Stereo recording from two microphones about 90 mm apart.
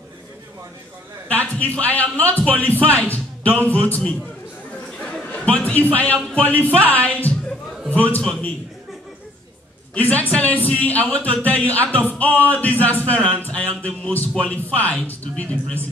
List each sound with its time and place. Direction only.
1.3 s a sound: 15° left (ahead or behind)
1.8 s speech: 15° left (ahead or behind)
4.9 s chuckle: 10° left (ahead or behind)
6.2 s speech: 15° left (ahead or behind)
7.1 s a sound: 15° left (ahead or behind)
7.9 s speech: 15° left (ahead or behind)
9.9 s speech: 20° left (ahead or behind)